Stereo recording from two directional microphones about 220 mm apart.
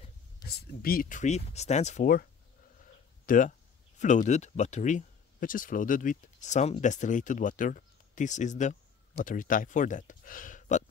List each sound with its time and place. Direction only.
0.4 s speech: 45° left (ahead or behind)
2.8 s a sound: 35° left (ahead or behind)
4.0 s speech: 35° left (ahead or behind)